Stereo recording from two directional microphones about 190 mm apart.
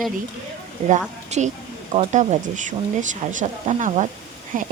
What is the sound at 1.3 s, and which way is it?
Speech, 35° right (ahead or behind).